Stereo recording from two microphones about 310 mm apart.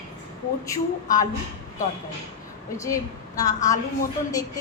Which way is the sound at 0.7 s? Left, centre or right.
Centre.